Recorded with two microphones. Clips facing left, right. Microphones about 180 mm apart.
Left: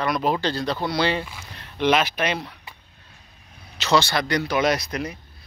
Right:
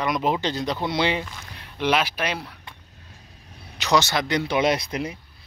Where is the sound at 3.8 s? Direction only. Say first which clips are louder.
Left 1 dB; 15° right (ahead or behind).